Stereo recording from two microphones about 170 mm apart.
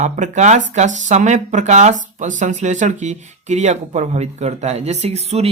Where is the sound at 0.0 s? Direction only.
45° right (ahead or behind).